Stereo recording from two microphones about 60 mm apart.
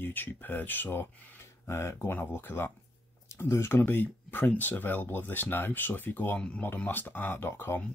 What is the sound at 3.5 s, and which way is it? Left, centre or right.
Speech, left.